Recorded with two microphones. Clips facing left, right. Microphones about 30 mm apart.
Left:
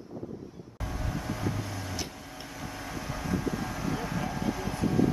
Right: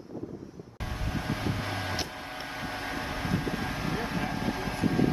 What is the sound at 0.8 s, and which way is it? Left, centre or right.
Vehicle, right.